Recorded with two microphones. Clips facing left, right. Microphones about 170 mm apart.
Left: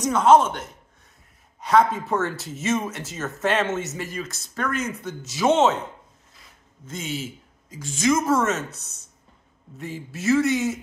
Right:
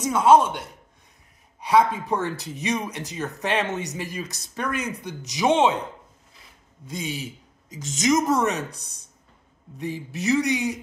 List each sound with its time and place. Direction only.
0.0 s speech: 10° right (ahead or behind)
6.9 s speech: 15° right (ahead or behind)